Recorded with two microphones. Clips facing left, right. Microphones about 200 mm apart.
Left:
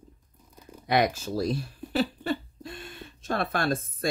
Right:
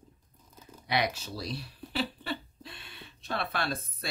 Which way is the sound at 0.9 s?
50° left (ahead or behind).